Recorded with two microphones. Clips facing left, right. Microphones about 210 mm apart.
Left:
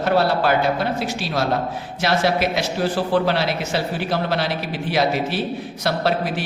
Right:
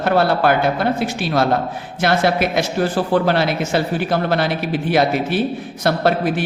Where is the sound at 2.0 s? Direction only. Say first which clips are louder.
Right 3 dB; 55° right (ahead or behind).